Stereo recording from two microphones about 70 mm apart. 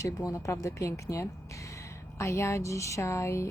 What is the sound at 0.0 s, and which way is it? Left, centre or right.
Speech, left.